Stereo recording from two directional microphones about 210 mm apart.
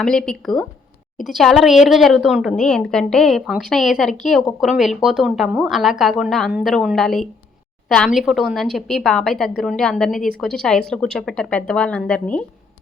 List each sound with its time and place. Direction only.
0.0 s a woman's voice: 5° left (ahead or behind)